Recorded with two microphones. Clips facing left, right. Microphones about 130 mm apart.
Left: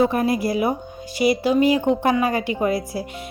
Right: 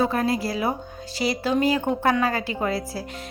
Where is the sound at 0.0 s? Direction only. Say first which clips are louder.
Left 4 dB; 15° left (ahead or behind).